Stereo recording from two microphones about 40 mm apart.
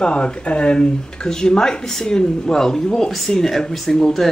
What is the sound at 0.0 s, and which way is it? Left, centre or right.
Speech, left.